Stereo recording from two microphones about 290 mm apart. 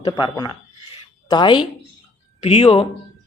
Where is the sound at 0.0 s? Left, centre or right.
Centre.